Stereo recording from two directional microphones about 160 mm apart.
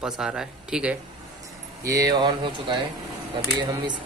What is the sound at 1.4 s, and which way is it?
Speech, 20° right (ahead or behind).